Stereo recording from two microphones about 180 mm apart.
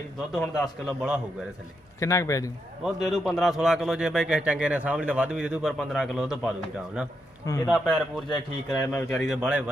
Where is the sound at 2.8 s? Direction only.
Centre (ahead or behind).